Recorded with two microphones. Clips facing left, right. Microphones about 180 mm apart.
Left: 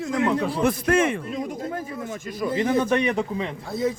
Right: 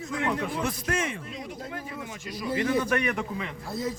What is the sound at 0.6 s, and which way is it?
Speech, 55° left (ahead or behind).